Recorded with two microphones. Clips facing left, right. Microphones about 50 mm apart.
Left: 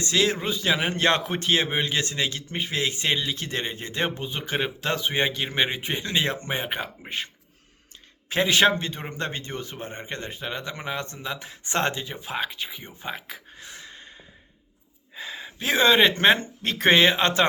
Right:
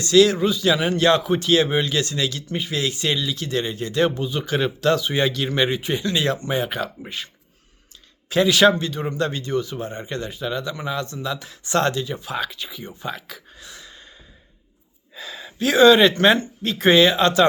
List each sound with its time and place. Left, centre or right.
0.0 s a man's voice: left
8.3 s speech: left
13.0 s a sound: left
15.1 s speech: left
16.6 s speech: left